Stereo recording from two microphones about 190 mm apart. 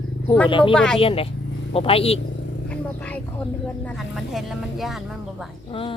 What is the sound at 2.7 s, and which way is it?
Speech, 5° left (ahead or behind).